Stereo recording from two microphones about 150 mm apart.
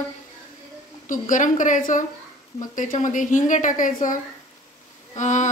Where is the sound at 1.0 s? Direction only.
60° left (ahead or behind).